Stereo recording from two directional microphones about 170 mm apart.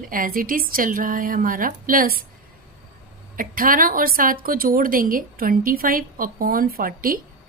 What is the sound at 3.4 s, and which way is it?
A woman's voice, 55° right (ahead or behind).